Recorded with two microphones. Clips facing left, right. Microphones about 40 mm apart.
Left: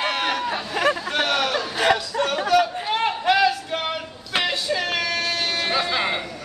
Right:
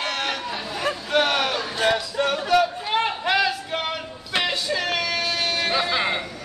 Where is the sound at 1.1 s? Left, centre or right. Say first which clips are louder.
Right 1 dB; centre.